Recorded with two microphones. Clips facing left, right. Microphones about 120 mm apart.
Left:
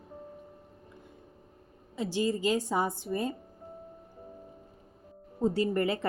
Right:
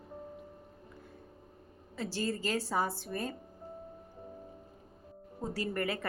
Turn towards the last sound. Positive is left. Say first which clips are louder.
# left 6 dB
turn(degrees=25)  # may be behind; listen again after turning